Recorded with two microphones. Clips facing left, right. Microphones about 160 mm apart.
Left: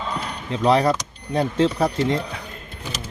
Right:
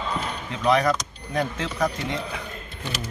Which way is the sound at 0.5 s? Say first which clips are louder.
Left 3 dB; 30° left (ahead or behind).